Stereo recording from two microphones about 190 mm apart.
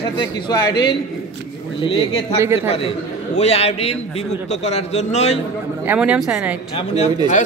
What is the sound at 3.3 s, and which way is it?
A man's voice, 35° left (ahead or behind).